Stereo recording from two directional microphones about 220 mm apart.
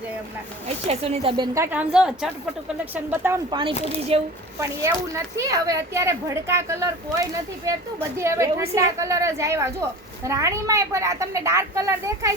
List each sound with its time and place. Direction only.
0.9 s speech: 30° right (ahead or behind)
1.5 s a woman's voice: 10° right (ahead or behind)
3.5 s speech: 20° right (ahead or behind)
4.6 s speech: 15° right (ahead or behind)